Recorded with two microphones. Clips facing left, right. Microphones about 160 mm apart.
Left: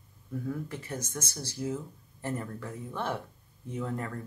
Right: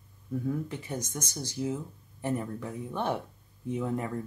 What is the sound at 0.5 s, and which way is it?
Speech, 15° right (ahead or behind).